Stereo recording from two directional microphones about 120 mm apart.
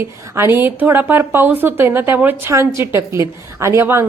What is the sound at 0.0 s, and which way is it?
A woman's voice, 20° right (ahead or behind).